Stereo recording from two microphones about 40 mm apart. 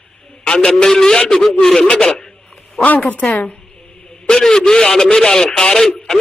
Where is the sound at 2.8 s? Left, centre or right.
Left.